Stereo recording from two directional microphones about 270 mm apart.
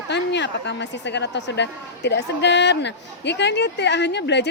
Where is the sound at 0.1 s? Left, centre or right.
Left.